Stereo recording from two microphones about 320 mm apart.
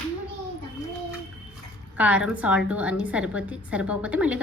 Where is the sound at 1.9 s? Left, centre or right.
Centre.